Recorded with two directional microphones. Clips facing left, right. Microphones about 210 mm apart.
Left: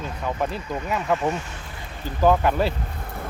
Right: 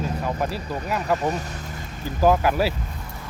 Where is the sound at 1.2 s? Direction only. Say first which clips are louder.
Even; 40° right (ahead or behind).